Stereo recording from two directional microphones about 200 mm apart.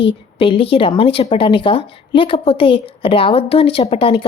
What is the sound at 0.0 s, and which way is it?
Speech, 25° left (ahead or behind).